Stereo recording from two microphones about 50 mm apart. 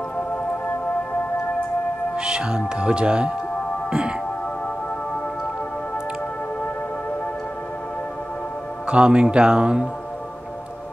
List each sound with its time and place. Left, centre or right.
2.1 s speech: centre
8.8 s speech: centre